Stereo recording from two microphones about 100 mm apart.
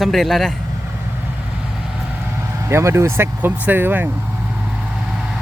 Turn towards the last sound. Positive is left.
turn(degrees=-20)  # may be behind; listen again after turning